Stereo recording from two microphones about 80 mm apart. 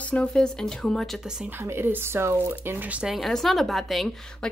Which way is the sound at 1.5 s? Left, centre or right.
Right.